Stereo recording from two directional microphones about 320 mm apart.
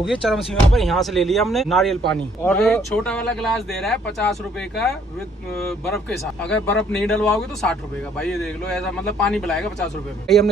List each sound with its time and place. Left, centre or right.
0.0 s speech: centre
5.6 s speech: centre